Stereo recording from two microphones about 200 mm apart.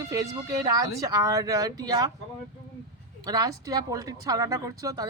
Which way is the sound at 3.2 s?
20° right (ahead or behind).